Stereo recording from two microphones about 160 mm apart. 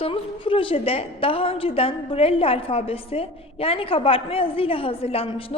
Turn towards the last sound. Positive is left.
turn(degrees=35)  # may be behind; listen again after turning